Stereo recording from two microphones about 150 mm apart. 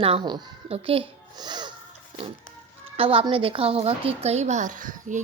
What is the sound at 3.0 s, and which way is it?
A woman's voice, 35° right (ahead or behind).